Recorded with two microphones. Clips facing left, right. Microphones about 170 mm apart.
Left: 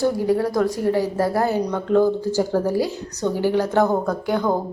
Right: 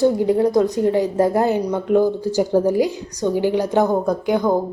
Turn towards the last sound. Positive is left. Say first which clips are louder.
# right 3 dB
turn(degrees=-15)  # may be behind; listen again after turning